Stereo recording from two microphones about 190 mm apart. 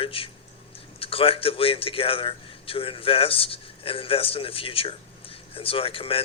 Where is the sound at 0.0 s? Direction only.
30° left (ahead or behind).